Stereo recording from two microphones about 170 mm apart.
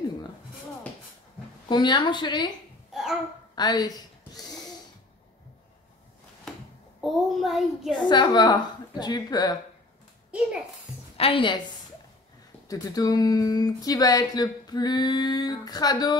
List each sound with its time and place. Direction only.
1.7 s speech: 25° left (ahead or behind)
2.9 s babbling: 5° right (ahead or behind)
3.5 s speech: 25° left (ahead or behind)
7.0 s child singing: centre (ahead or behind)
8.0 s speech: 25° left (ahead or behind)
11.1 s a woman's voice: 30° left (ahead or behind)
12.6 s speech: 20° left (ahead or behind)